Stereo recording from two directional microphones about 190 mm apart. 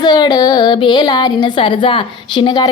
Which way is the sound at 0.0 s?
20° left (ahead or behind).